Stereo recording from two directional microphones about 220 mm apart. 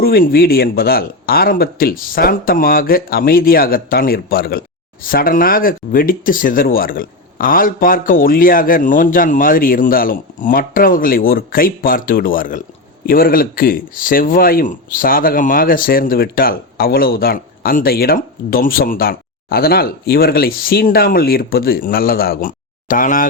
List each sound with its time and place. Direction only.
0.0 s speech: 40° left (ahead or behind)